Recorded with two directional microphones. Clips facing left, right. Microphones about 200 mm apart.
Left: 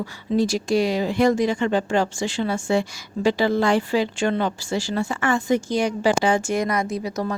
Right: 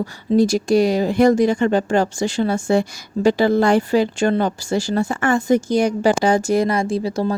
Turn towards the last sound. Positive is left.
turn(degrees=-30)  # may be behind; listen again after turning